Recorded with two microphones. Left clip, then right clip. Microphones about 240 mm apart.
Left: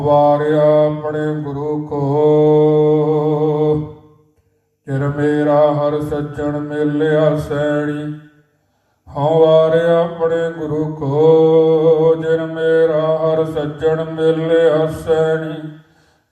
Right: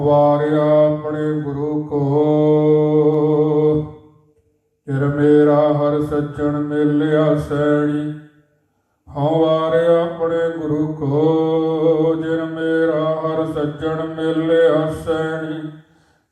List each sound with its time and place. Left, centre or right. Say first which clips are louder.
0.0 s mantra: left 2 dB; left
4.9 s mantra: right 3 dB; left
9.1 s mantra: left 5 dB; left